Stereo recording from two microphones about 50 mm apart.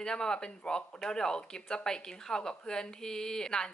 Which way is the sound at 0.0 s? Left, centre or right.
Centre.